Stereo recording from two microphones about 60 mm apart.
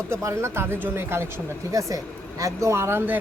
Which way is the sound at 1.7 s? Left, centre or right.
Right.